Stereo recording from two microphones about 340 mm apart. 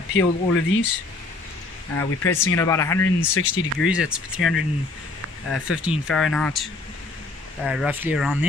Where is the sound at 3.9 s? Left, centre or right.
Centre.